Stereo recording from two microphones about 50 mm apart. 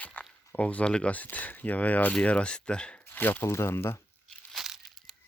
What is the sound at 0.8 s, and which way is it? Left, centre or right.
Speech, centre.